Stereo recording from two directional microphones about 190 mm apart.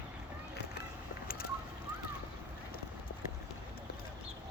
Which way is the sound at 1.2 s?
50° left (ahead or behind).